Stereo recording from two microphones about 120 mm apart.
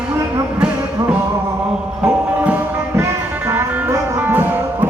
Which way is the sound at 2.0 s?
10° right (ahead or behind).